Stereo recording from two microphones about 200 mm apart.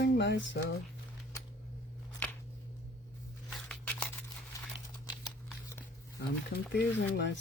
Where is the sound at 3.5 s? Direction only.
5° left (ahead or behind).